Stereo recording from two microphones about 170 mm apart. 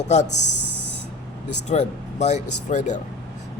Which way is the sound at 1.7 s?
40° left (ahead or behind).